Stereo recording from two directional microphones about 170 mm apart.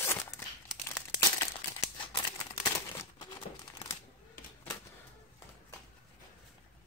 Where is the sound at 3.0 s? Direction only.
25° left (ahead or behind).